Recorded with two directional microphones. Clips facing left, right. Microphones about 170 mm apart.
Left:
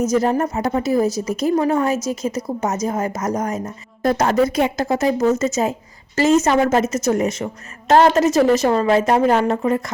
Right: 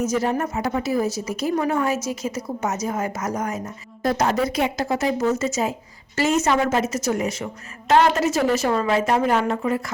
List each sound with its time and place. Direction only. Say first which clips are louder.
0.0 s speech: left 5 dB; 40° left (ahead or behind)
4.0 s speech: left 4 dB; 50° left (ahead or behind)